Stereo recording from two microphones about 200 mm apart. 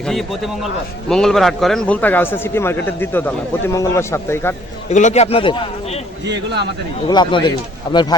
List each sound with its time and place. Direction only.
0.0 s a man's voice: centre (ahead or behind)
4.9 s a man's voice: 35° left (ahead or behind)
6.2 s a man's voice: 60° right (ahead or behind)
7.1 s speech: 25° left (ahead or behind)